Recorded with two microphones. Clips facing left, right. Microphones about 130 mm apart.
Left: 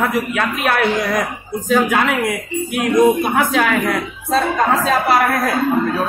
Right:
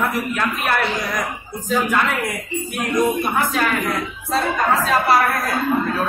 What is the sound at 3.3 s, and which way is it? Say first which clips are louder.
Speech: left 4 dB; 90° left.